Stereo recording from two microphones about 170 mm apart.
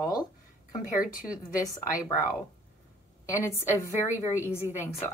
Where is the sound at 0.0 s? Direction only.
25° left (ahead or behind).